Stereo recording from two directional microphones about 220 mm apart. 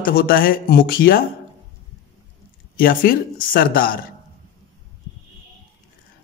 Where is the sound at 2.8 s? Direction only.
40° left (ahead or behind).